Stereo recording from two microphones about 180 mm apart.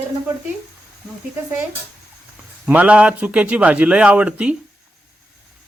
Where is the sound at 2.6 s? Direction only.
10° right (ahead or behind).